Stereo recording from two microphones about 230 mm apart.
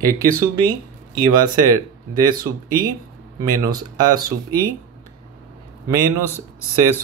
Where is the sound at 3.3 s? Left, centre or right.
Centre.